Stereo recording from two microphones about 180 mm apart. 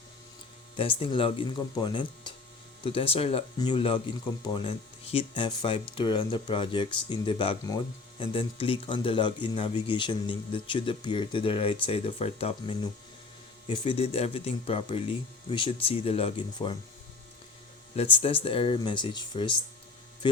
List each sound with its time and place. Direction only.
0.8 s speech: 30° left (ahead or behind)
17.9 s speech: 30° left (ahead or behind)